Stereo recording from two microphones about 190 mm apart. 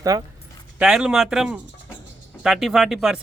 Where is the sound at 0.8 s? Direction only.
5° right (ahead or behind).